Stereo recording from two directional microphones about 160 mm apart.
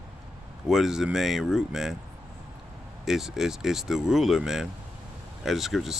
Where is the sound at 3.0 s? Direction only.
Centre (ahead or behind).